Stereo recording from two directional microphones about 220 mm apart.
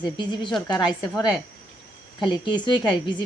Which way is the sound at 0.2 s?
20° left (ahead or behind).